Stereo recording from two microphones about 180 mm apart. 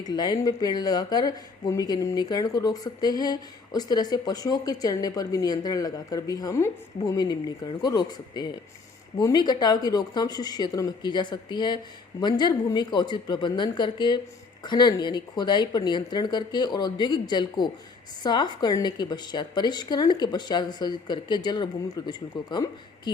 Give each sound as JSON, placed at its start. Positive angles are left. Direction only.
{"t": 0.0, "sound": "speech", "side_deg": 20}